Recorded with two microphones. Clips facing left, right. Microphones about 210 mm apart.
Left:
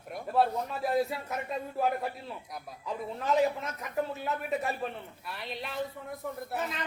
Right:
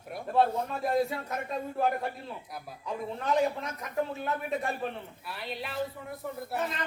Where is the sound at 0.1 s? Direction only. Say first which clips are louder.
Right 1 dB; 5° left (ahead or behind).